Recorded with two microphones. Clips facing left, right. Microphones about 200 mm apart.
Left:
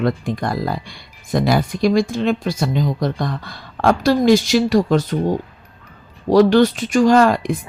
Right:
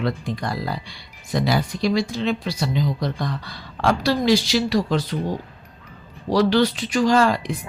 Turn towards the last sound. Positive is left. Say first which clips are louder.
# left 5 dB
turn(degrees=50)  # may be behind; listen again after turning